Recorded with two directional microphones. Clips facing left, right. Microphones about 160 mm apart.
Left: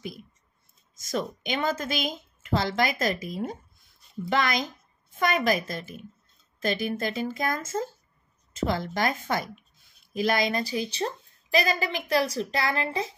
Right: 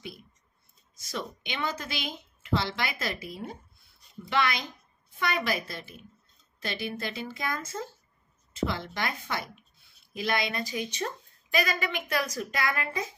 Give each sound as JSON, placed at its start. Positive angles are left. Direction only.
{"t": 0.9, "sound": "a woman's voice", "side_deg": 45}